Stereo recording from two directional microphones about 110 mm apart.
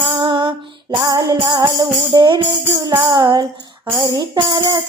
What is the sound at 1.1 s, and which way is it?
Music, 35° right (ahead or behind).